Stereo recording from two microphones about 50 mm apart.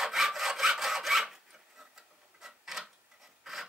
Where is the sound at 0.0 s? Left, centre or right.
Centre.